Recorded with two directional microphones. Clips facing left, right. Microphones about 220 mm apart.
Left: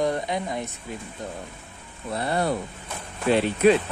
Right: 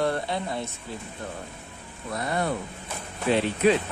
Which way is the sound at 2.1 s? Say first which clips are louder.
Left 3 dB; 30° left (ahead or behind).